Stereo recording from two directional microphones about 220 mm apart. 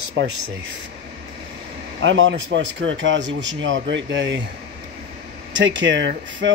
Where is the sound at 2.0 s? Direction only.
60° right (ahead or behind).